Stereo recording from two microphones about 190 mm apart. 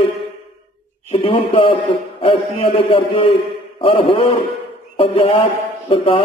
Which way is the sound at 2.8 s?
30° left (ahead or behind).